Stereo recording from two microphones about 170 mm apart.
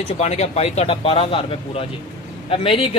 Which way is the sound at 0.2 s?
40° left (ahead or behind).